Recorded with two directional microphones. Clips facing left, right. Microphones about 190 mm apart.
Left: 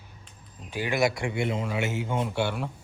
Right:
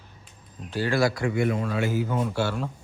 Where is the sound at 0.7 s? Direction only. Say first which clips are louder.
Right 2 dB; 15° left (ahead or behind).